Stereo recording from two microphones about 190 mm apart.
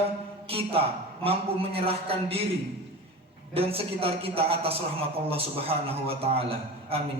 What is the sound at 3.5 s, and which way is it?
A man's voice, 30° right (ahead or behind).